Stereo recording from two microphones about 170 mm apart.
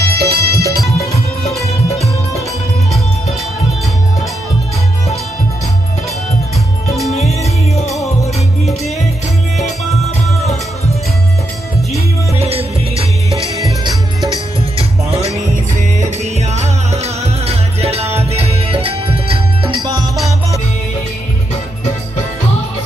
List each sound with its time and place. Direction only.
0.0 s music: 65° right (ahead or behind)
7.2 s music: 40° left (ahead or behind)
12.4 s music: 35° right (ahead or behind)
14.8 s music: 35° right (ahead or behind)